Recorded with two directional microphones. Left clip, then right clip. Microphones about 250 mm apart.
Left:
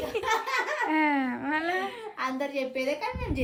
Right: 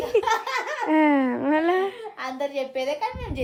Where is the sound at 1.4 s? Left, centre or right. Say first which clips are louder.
Right 7 dB; right.